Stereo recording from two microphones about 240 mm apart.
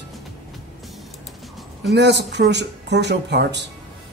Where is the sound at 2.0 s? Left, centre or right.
Right.